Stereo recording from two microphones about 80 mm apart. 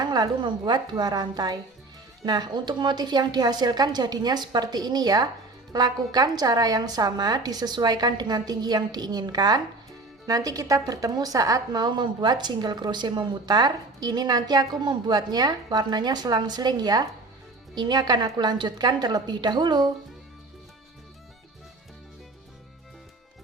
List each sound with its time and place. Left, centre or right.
0.0 s speech: right